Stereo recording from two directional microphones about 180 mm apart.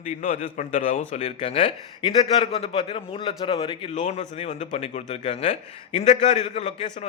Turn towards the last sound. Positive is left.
turn(degrees=40)  # may be behind; listen again after turning